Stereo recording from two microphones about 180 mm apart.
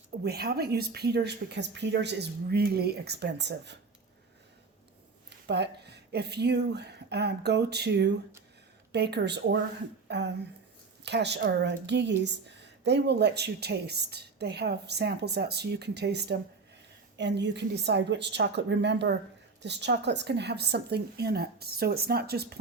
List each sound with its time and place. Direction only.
0.3 s a woman's voice: 60° right (ahead or behind)
5.3 s a woman's voice: 70° right (ahead or behind)